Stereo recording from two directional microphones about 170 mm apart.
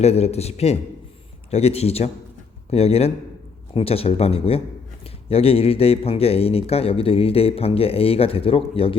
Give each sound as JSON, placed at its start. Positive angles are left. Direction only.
{"t": 0.0, "sound": "a man's voice", "side_deg": 35}